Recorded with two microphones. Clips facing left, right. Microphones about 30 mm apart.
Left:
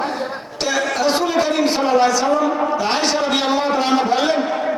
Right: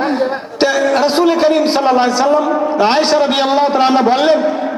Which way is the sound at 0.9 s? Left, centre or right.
Right.